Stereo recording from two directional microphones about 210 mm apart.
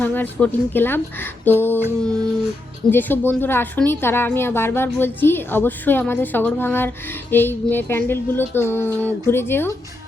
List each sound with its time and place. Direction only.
0.0 s a woman's voice: 10° left (ahead or behind)
2.0 s music: 5° left (ahead or behind)
2.9 s a woman's voice: 10° left (ahead or behind)